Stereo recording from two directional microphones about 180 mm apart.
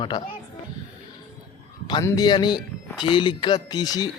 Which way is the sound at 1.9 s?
20° left (ahead or behind).